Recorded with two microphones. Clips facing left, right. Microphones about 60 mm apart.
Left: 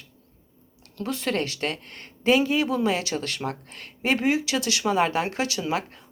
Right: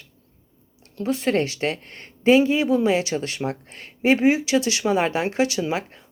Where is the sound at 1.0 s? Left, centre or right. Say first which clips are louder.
Right 5 dB; right.